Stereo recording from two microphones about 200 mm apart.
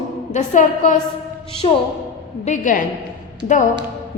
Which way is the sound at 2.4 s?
40° left (ahead or behind).